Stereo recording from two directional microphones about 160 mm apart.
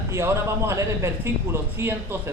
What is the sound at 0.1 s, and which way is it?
A man's voice, 15° right (ahead or behind).